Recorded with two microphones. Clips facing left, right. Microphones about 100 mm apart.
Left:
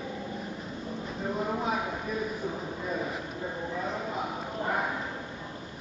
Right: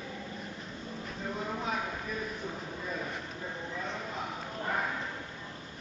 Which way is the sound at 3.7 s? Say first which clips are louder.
Left 5 dB; 10° left (ahead or behind).